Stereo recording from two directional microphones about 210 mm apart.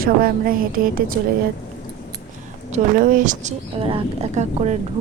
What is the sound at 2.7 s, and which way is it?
Speech, 35° right (ahead or behind).